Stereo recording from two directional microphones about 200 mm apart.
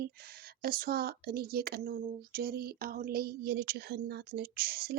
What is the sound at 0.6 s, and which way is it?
Speech, 45° right (ahead or behind).